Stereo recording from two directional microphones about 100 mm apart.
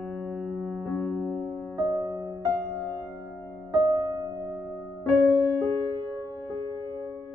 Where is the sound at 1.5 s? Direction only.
45° right (ahead or behind).